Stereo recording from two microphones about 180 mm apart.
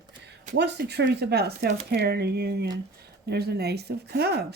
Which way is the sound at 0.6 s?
70° right (ahead or behind).